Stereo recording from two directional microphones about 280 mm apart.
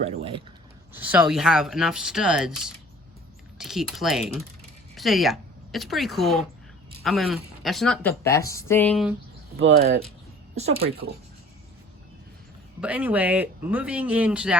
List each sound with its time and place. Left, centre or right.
0.0 s speech: right
0.9 s speech: centre
9.7 s speech: right
10.5 s speech: right
12.8 s speech: centre